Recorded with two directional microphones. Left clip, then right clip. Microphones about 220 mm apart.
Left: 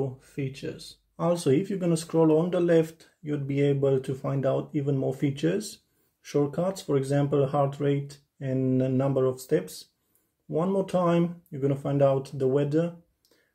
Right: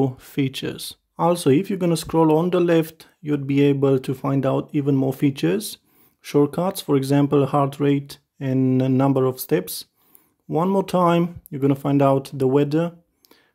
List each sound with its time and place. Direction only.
0.0 s speech: 50° right (ahead or behind)